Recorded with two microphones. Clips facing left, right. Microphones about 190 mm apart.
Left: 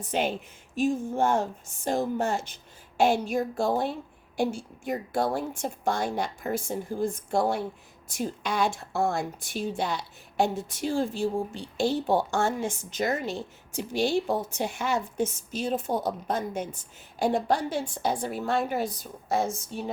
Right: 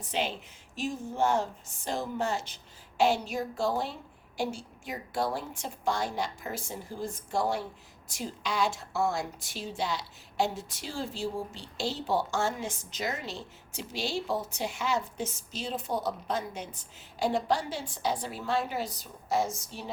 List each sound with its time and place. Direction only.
0.1 s a woman's voice: 50° left (ahead or behind)